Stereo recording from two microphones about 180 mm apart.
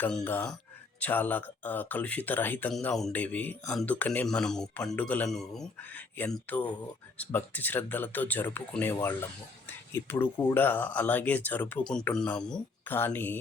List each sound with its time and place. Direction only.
0.2 s speech: 10° left (ahead or behind)